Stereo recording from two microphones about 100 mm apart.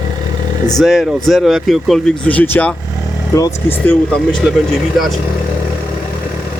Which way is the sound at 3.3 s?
30° left (ahead or behind).